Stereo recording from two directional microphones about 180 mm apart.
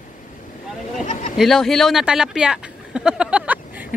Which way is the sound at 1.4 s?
Centre (ahead or behind).